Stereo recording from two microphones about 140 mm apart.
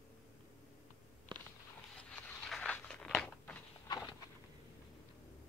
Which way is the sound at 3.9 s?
30° left (ahead or behind).